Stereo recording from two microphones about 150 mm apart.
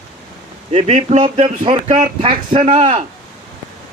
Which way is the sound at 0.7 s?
50° right (ahead or behind).